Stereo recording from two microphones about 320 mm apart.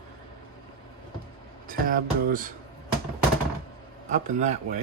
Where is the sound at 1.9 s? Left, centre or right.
Right.